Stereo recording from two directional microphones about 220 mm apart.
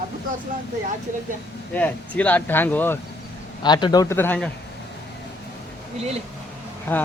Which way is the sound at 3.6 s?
20° left (ahead or behind).